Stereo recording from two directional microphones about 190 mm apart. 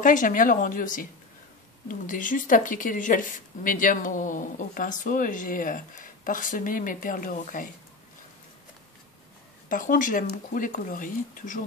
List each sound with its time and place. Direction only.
0.0 s speech: 45° left (ahead or behind)
9.7 s speech: 45° left (ahead or behind)